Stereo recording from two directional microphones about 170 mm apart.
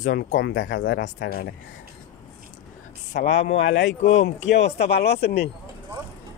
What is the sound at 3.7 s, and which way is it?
Speech, 90° left.